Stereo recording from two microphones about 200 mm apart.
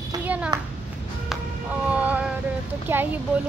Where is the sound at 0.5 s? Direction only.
20° right (ahead or behind).